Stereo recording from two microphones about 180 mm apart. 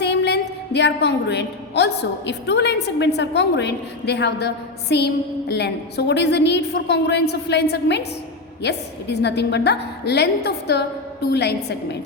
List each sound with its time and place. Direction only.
0.0 s a woman's voice: 70° left (ahead or behind)